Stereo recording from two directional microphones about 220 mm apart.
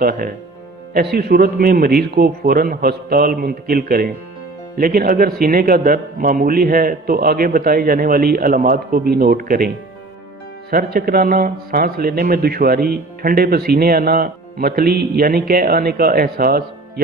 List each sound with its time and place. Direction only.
0.9 s speech: 45° right (ahead or behind)
10.7 s speech: 40° right (ahead or behind)